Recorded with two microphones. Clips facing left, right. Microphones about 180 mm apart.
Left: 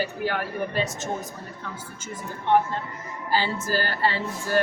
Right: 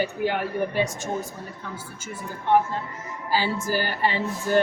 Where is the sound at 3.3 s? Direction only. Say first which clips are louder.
Right 1 dB; 15° right (ahead or behind).